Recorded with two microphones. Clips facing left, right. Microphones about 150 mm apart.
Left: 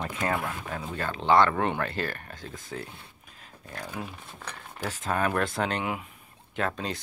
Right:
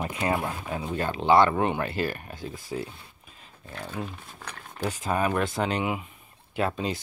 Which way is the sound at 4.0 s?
Centre (ahead or behind).